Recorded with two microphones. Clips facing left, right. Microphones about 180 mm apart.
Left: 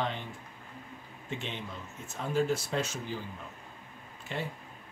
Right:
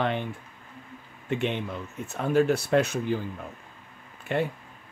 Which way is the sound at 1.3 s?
60° right (ahead or behind).